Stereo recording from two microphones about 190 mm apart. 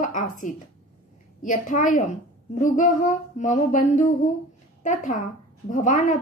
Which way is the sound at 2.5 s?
40° left (ahead or behind).